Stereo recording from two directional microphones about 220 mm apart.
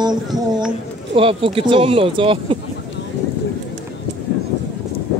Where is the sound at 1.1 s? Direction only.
25° right (ahead or behind).